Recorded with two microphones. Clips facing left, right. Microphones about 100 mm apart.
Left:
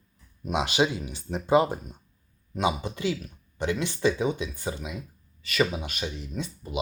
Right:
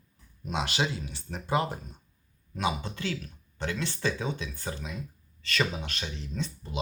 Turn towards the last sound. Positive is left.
turn(degrees=10)  # may be behind; listen again after turning